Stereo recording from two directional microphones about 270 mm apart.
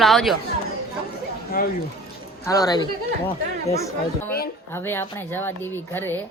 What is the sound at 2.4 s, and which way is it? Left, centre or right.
Speech, centre.